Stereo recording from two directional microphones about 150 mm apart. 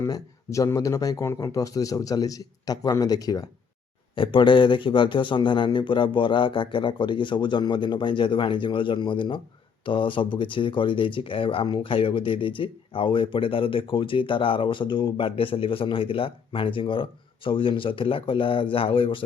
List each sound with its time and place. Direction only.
0.0 s speech: 20° left (ahead or behind); by 19.2 s 35° left (ahead or behind)